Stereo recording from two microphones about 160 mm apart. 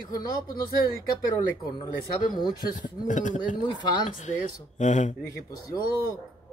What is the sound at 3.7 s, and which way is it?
Speech, 30° left (ahead or behind).